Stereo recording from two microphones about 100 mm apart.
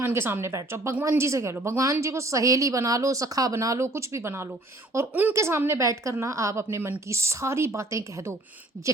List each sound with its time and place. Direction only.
0.0 s a woman's voice: 25° right (ahead or behind)